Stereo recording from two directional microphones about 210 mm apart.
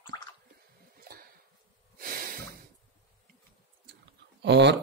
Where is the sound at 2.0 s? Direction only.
45° right (ahead or behind).